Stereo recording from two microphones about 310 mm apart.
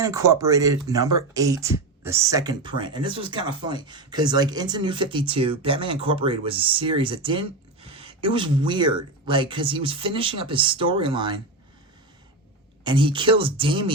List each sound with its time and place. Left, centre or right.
0.0 s speech: centre
12.8 s speech: centre